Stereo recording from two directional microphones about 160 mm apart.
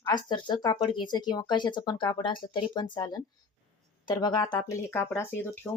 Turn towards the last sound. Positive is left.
turn(degrees=15)  # may be behind; listen again after turning